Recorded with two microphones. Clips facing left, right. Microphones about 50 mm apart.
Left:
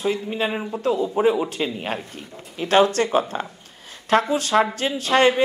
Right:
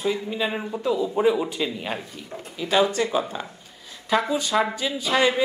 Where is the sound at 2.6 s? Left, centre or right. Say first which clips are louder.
Left 4 dB; left.